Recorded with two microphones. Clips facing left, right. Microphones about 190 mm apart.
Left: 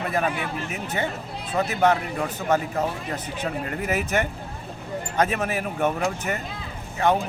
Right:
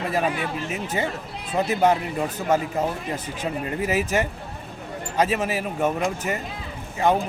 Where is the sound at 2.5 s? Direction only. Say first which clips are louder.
Right 1 dB; 10° right (ahead or behind).